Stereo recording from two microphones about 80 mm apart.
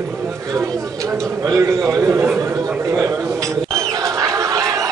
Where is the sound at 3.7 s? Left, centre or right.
Right.